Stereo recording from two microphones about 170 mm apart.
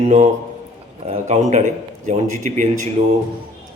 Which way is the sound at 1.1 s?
40° right (ahead or behind).